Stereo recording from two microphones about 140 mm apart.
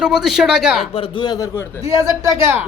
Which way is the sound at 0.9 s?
40° left (ahead or behind).